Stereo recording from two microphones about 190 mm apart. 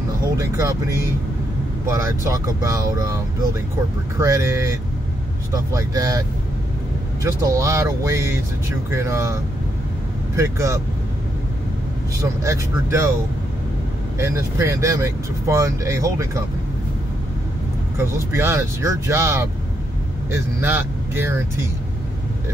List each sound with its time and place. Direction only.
0.4 s speech: 15° right (ahead or behind)
1.9 s speech: 15° right (ahead or behind)
4.2 s speech: 15° right (ahead or behind)
7.4 s speech: 15° right (ahead or behind)
12.2 s speech: 15° right (ahead or behind)
14.1 s speech: 15° right (ahead or behind)
17.9 s speech: 15° right (ahead or behind)